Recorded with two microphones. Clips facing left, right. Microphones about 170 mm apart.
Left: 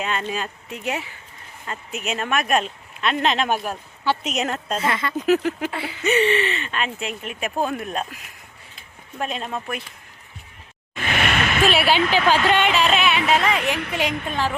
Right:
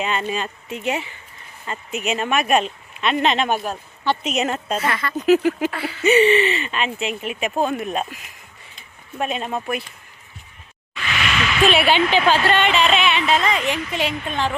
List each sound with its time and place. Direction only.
0.0 s speech: centre (ahead or behind)
4.8 s speech: 25° left (ahead or behind)
5.1 s speech: centre (ahead or behind)
5.7 s speech: 20° left (ahead or behind)
6.0 s speech: 5° right (ahead or behind)
8.7 s a sound: 5° right (ahead or behind)
10.9 s a sound: 50° left (ahead or behind)
11.6 s speech: centre (ahead or behind)
12.5 s music: 10° left (ahead or behind)
13.7 s a woman's voice: 60° left (ahead or behind)
14.3 s music: 10° left (ahead or behind)